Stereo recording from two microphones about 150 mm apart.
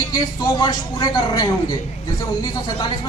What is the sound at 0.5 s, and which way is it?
Speech, 25° left (ahead or behind).